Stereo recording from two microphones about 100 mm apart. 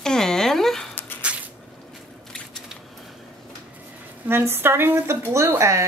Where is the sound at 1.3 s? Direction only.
10° right (ahead or behind).